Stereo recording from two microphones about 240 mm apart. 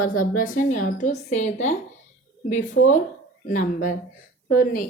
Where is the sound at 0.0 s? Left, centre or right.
Left.